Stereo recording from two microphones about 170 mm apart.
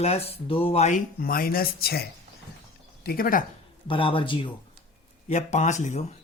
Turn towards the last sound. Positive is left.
turn(degrees=45)  # may be behind; listen again after turning